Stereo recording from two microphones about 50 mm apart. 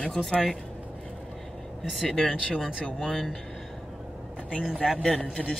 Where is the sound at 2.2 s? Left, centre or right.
Centre.